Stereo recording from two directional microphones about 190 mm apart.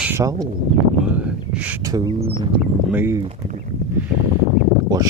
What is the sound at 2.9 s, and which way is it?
Speech, 10° right (ahead or behind).